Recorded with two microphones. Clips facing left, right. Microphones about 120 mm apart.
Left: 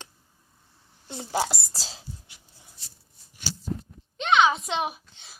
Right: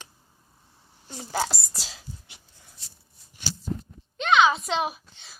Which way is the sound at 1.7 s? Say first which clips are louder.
Left 1 dB; 35° left (ahead or behind).